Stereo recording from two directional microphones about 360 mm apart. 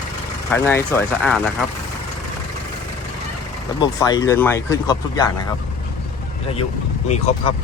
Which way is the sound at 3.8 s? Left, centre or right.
Centre.